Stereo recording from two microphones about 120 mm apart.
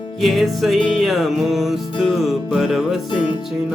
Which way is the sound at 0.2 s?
Centre (ahead or behind).